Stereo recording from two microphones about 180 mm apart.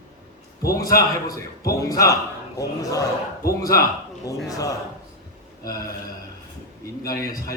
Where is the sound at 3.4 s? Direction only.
55° left (ahead or behind).